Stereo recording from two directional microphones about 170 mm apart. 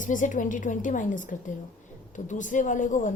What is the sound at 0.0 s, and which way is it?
A woman's voice, 50° left (ahead or behind).